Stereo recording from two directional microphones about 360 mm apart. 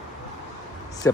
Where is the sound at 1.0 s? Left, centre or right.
Centre.